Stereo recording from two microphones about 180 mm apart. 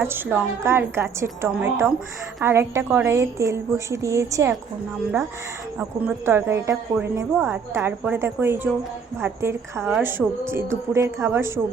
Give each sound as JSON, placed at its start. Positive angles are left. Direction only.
{"t": 0.1, "sound": "a woman's voice", "side_deg": -10}
{"t": 6.0, "sound": "a woman's voice", "side_deg": -10}